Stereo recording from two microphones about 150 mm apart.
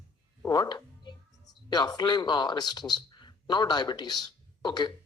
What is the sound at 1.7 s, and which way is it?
Speech, 30° left (ahead or behind).